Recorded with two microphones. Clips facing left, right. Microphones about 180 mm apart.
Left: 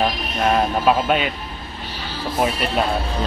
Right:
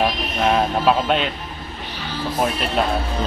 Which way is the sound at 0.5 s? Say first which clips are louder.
Even; centre (ahead or behind).